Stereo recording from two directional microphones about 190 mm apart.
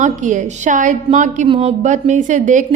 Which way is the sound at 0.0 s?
40° right (ahead or behind).